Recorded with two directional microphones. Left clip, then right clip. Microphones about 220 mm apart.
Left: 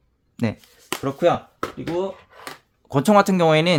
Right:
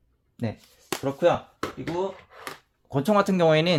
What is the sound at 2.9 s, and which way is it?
Speech, 30° left (ahead or behind).